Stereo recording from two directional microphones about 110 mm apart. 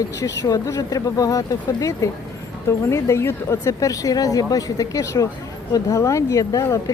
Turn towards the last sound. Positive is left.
turn(degrees=30)  # may be behind; listen again after turning